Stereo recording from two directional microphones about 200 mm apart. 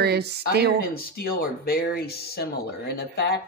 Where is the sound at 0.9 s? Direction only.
50° left (ahead or behind).